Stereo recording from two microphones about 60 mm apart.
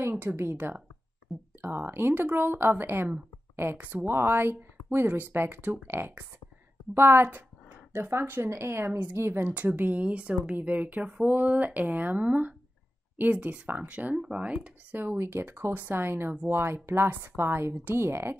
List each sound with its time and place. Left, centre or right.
0.1 s speech: right
9.5 s speech: right